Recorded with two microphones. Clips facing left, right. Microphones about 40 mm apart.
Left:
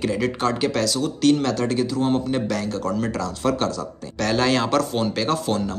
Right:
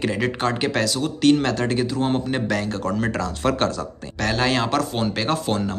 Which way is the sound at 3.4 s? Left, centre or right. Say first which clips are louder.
Right 1 dB; right.